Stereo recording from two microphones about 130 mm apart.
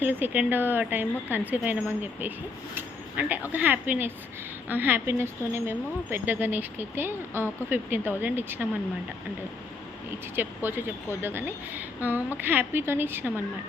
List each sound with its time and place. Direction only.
0.0 s speech: 15° right (ahead or behind)
10.3 s speech: 15° right (ahead or behind)